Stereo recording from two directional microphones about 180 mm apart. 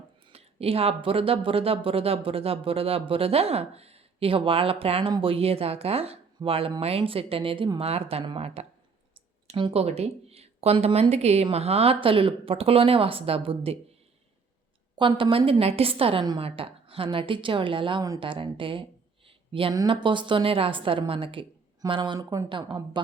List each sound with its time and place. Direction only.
0.3 s speech: 35° right (ahead or behind)
14.9 s a woman's voice: 30° right (ahead or behind)